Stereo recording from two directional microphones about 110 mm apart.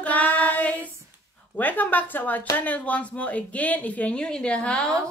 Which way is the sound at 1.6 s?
15° left (ahead or behind).